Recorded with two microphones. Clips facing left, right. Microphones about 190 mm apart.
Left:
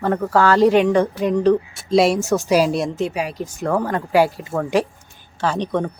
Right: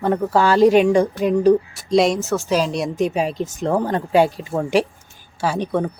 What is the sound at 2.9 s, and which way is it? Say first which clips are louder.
Speech: right 3 dB; 20° right (ahead or behind).